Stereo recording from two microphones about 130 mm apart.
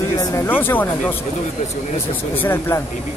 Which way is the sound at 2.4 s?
15° left (ahead or behind).